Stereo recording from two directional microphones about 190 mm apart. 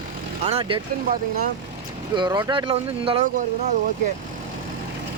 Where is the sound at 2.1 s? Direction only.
25° right (ahead or behind).